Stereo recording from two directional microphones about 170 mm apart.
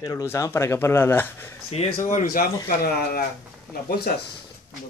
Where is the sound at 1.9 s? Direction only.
50° left (ahead or behind).